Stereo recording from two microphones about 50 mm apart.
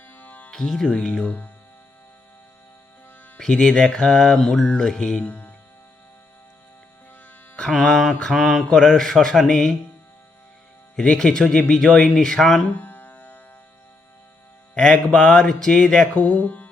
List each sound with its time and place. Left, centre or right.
0.1 s music: left
0.5 s speech: centre
1.2 s music: left
3.3 s speech: centre
4.6 s speech: centre
5.2 s speech: left
7.8 s speech: centre
8.3 s mantra: centre
8.7 s speech: centre
10.9 s speech: centre
12.7 s music: left
14.8 s speech: centre
16.1 s music: left